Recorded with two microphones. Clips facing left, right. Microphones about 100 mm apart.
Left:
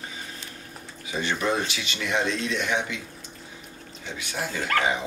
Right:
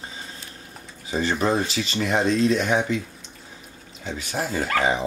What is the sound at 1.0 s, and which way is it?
Speech, 35° right (ahead or behind).